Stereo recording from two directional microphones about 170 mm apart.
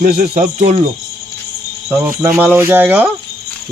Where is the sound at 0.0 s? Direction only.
50° right (ahead or behind).